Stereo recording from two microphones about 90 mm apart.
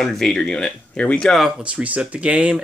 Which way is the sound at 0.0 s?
5° left (ahead or behind).